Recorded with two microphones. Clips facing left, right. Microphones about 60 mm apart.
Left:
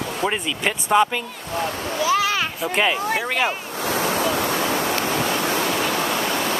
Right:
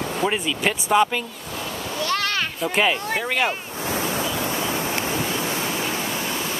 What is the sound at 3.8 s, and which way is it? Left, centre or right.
Waves, left.